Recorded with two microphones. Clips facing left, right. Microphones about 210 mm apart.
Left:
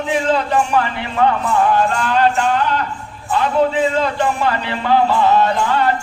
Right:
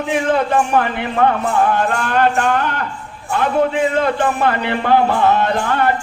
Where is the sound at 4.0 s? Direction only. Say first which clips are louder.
Right 1 dB; 55° right (ahead or behind).